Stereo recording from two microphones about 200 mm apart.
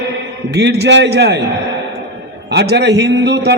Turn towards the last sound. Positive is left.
turn(degrees=-60)  # may be behind; listen again after turning